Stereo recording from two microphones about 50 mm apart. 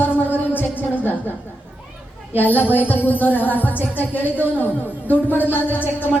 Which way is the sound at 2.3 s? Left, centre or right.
Left.